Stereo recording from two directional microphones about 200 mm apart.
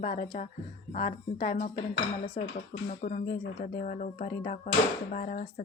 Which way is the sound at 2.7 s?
40° left (ahead or behind).